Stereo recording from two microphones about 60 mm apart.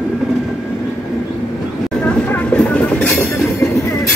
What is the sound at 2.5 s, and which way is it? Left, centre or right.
Vehicle, left.